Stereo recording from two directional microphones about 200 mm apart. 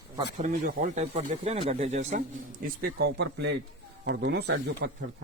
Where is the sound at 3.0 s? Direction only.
60° right (ahead or behind).